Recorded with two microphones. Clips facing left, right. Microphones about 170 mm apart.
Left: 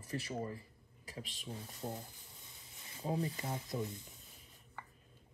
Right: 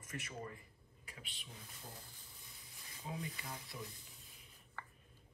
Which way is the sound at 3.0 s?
35° left (ahead or behind).